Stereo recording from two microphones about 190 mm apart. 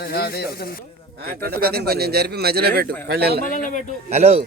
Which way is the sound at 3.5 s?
45° left (ahead or behind).